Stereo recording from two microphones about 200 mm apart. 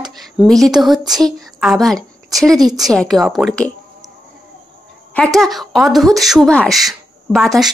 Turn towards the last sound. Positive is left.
turn(degrees=0)  # may be behind; listen again after turning